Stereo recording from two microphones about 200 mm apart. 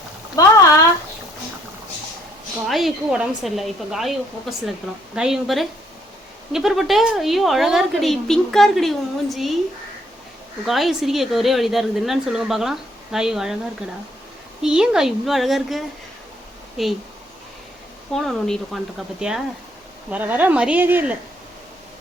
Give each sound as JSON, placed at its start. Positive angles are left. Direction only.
{"t": 0.4, "sound": "speech", "side_deg": 15}
{"t": 2.6, "sound": "a woman's voice", "side_deg": 0}
{"t": 10.7, "sound": "a woman's voice", "side_deg": 0}
{"t": 14.6, "sound": "a woman's voice", "side_deg": -5}
{"t": 18.1, "sound": "a woman's voice", "side_deg": 0}